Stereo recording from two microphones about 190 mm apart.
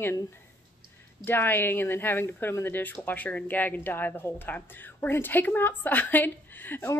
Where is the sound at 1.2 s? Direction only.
10° left (ahead or behind).